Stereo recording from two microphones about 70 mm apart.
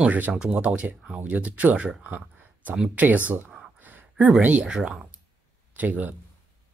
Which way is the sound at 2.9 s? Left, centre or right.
Right.